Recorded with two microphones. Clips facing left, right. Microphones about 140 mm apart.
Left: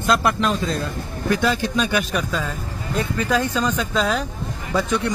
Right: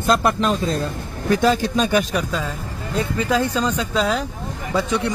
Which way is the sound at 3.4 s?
25° right (ahead or behind).